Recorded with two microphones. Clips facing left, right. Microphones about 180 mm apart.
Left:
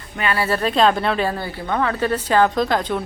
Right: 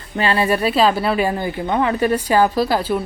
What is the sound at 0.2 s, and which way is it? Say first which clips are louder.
Speech: right 4 dB; 30° right (ahead or behind).